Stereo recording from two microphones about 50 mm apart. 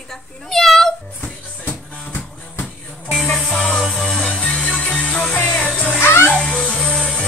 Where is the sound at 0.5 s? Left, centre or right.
Centre.